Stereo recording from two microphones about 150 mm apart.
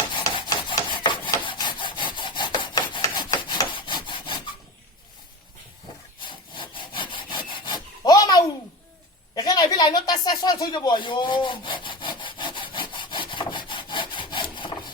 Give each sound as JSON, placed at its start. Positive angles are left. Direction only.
{"t": 0.1, "sound": "rub", "side_deg": 30}
{"t": 6.2, "sound": "sawing", "side_deg": 35}
{"t": 9.3, "sound": "a sound", "side_deg": 30}